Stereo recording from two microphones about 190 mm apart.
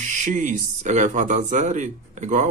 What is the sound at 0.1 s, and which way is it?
Speech, 40° right (ahead or behind).